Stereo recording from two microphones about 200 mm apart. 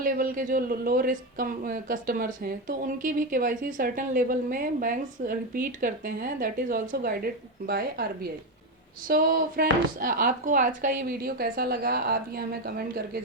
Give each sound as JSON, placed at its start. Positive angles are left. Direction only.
{"t": 0.0, "sound": "speech", "side_deg": -45}